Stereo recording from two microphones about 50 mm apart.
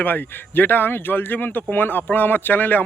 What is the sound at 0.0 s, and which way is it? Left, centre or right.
A man's voice, left.